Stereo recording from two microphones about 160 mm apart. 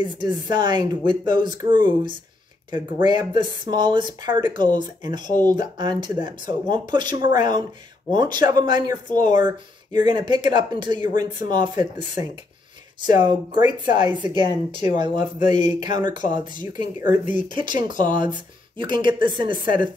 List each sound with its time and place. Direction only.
0.1 s speech: 30° right (ahead or behind)
13.0 s speech: 25° right (ahead or behind)
14.7 s speech: 50° left (ahead or behind)
15.0 s speech: 30° right (ahead or behind)
17.1 s speech: 50° left (ahead or behind)
17.5 s speech: 30° right (ahead or behind)